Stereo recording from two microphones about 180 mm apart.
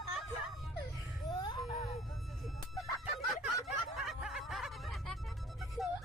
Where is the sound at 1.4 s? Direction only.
25° left (ahead or behind).